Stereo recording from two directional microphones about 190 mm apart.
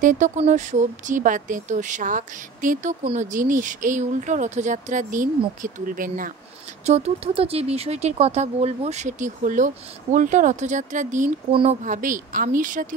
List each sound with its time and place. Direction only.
0.0 s speech: 40° right (ahead or behind)
6.9 s speech: 35° right (ahead or behind)